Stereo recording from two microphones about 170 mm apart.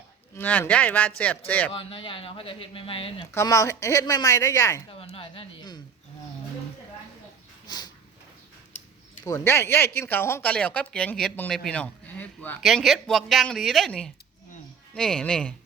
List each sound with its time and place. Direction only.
0.3 s speech: 10° left (ahead or behind)
1.7 s speech: 30° left (ahead or behind)
3.3 s speech: 20° left (ahead or behind)
4.9 s speech: 30° left (ahead or behind)
7.7 s a sound: 25° left (ahead or behind)
9.2 s speech: 15° left (ahead or behind)